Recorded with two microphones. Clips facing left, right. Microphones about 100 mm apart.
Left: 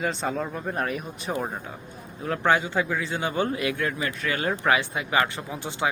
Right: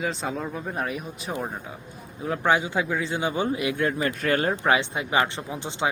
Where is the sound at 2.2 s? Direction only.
10° right (ahead or behind); by 4.1 s 30° right (ahead or behind).